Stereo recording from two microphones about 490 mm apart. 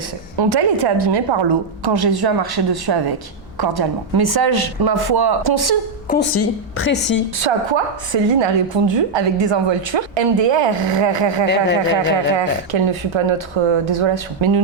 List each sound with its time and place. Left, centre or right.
0.3 s a woman's voice: right
6.7 s a woman's voice: left
7.3 s a woman's voice: right
11.4 s a woman's voice: left
11.8 s speech: right